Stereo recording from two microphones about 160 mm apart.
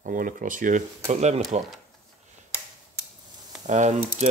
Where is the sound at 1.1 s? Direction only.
45° right (ahead or behind).